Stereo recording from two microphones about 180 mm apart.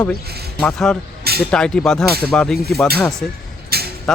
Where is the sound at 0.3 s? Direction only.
60° right (ahead or behind).